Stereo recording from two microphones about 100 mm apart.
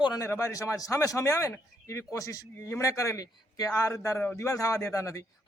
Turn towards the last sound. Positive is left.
turn(degrees=30)  # may be behind; listen again after turning